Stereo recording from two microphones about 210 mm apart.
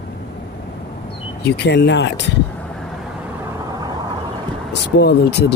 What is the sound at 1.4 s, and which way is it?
Speech, 55° left (ahead or behind).